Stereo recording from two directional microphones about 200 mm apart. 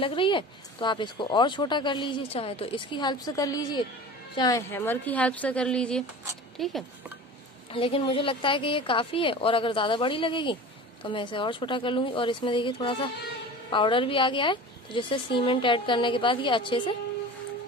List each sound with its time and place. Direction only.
0.0 s a woman's voice: 25° left (ahead or behind); by 6.7 s centre (ahead or behind)
7.7 s speech: 25° left (ahead or behind)